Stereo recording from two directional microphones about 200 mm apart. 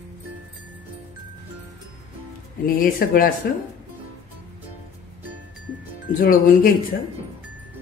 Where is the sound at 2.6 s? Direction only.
45° left (ahead or behind).